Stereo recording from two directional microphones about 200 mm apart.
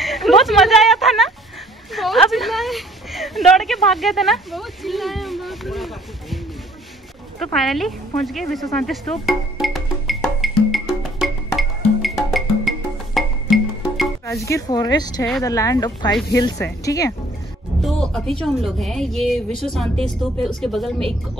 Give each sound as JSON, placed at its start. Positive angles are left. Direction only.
{"t": 0.0, "sound": "speech", "side_deg": 0}
{"t": 7.3, "sound": "speech", "side_deg": 0}
{"t": 9.2, "sound": "music", "side_deg": 0}
{"t": 14.2, "sound": "speech", "side_deg": 15}
{"t": 17.8, "sound": "speech", "side_deg": 0}